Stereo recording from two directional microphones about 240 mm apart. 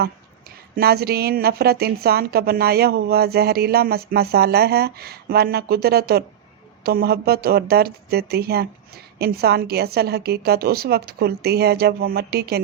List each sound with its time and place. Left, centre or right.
0.8 s a woman's voice: right